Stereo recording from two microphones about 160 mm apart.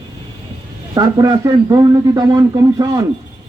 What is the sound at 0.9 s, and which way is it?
Speech, 25° right (ahead or behind).